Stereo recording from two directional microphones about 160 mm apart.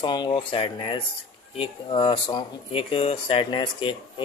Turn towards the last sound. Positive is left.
turn(degrees=30)  # may be behind; listen again after turning